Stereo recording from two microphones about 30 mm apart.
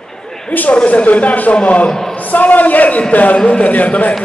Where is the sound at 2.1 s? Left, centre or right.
Left.